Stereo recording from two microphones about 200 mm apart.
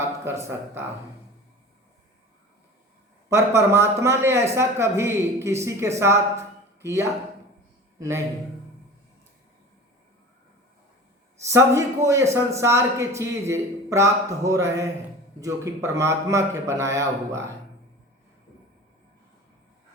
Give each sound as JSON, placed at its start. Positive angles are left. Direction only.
{"t": 0.0, "sound": "speech", "side_deg": -15}
{"t": 3.2, "sound": "a man's voice", "side_deg": -15}
{"t": 11.3, "sound": "a man's voice", "side_deg": -15}